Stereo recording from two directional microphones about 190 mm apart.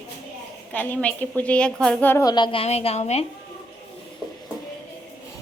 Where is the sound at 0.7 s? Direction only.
10° left (ahead or behind); by 3.2 s 35° left (ahead or behind).